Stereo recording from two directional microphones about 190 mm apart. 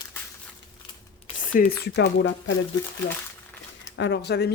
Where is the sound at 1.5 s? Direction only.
55° left (ahead or behind).